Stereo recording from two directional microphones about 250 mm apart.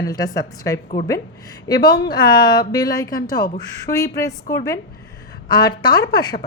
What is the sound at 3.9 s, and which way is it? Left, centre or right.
Speech, centre.